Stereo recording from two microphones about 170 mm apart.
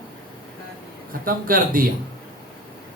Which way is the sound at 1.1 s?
55° right (ahead or behind).